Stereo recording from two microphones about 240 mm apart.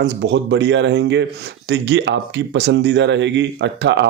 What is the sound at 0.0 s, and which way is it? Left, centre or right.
A man's voice, right.